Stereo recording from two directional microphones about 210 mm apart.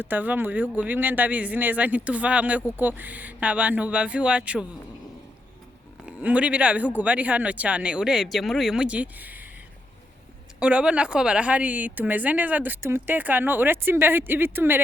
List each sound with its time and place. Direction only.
0.0 s speech: 10° right (ahead or behind)
6.1 s speech: 5° right (ahead or behind)
10.6 s speech: 5° right (ahead or behind)